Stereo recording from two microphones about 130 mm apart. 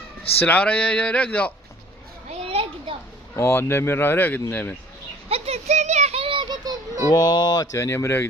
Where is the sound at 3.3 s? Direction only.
20° left (ahead or behind).